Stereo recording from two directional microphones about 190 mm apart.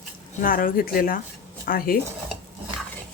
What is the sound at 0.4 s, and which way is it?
Speech, 50° left (ahead or behind).